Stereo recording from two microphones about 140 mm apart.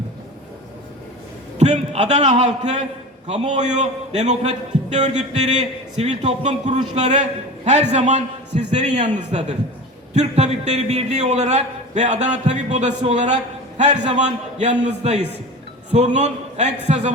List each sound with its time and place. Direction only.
1.5 s a man's voice: 55° right (ahead or behind)